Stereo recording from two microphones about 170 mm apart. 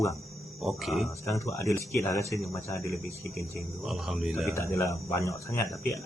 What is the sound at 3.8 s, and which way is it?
Speech, centre (ahead or behind).